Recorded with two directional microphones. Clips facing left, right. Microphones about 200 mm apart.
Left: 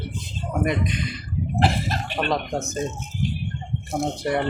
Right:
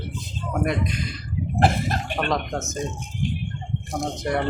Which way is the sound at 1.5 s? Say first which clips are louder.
Right 2 dB; 50° right (ahead or behind).